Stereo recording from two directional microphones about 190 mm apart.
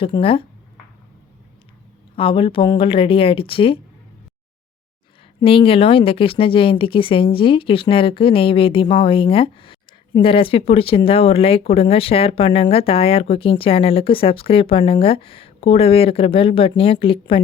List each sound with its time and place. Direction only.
0.0 s speech: 30° left (ahead or behind)
2.1 s speech: 30° left (ahead or behind)
5.4 s speech: 30° left (ahead or behind)